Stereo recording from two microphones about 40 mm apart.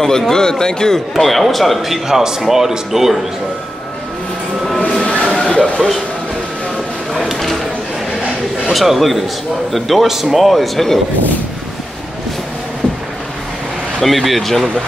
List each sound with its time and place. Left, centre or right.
0.3 s a man's voice: centre
1.1 s speech: centre
4.8 s a sound: left
8.7 s speech: centre
13.9 s speech: centre